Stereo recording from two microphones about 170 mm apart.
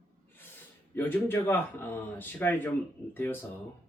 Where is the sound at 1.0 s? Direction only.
15° left (ahead or behind).